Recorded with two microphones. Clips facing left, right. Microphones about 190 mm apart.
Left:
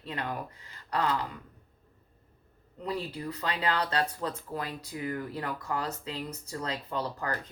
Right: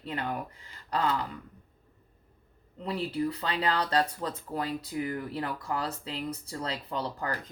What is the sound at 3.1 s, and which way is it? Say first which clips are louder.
Speech: right 4 dB; 30° right (ahead or behind).